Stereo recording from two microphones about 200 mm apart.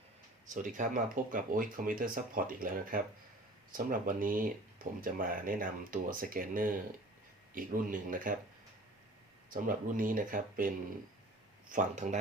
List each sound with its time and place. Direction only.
0.4 s speech: 40° right (ahead or behind)
9.5 s speech: 45° right (ahead or behind)